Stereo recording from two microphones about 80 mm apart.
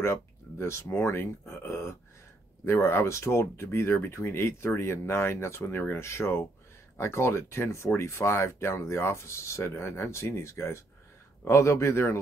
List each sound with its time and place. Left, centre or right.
0.0 s speech: left